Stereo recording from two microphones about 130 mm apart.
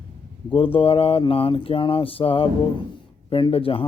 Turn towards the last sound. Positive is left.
turn(degrees=45)  # may be behind; listen again after turning